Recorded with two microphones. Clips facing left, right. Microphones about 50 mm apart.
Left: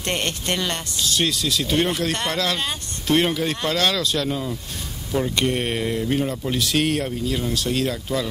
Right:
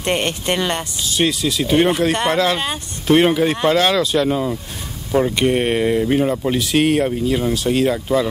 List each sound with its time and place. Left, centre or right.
0.0 s speech: centre